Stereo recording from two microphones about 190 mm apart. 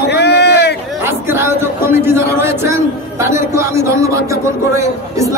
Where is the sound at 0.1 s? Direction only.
60° left (ahead or behind).